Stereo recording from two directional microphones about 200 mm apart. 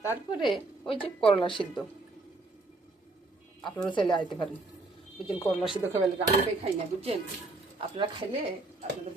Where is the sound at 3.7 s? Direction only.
25° left (ahead or behind).